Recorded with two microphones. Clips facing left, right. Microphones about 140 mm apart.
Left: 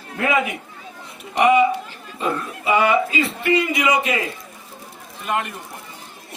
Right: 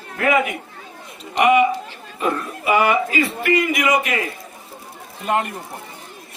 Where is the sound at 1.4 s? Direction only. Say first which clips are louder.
Even; 30° left (ahead or behind).